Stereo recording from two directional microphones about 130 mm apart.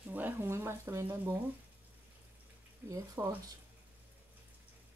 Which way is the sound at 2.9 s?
20° right (ahead or behind).